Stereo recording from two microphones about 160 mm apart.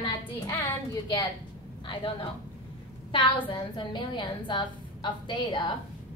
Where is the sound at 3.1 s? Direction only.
30° left (ahead or behind).